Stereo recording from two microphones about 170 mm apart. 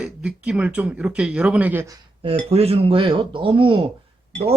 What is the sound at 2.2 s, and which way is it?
Speech, 35° right (ahead or behind).